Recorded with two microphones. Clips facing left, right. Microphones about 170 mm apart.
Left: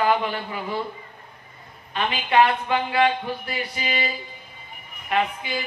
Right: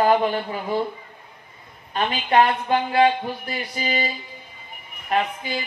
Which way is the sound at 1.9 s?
40° right (ahead or behind).